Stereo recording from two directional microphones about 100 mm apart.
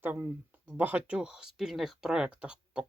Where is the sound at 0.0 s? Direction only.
20° right (ahead or behind).